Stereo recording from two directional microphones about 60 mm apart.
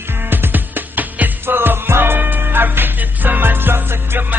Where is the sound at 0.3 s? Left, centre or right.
Right.